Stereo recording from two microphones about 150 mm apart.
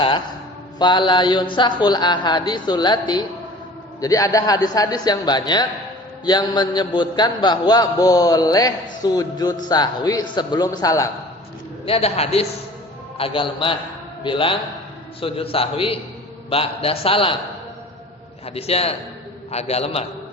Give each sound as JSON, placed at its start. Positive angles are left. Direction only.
{"t": 0.8, "sound": "a man's voice", "side_deg": 30}
{"t": 11.9, "sound": "a man's voice", "side_deg": 40}
{"t": 18.4, "sound": "a man's voice", "side_deg": 40}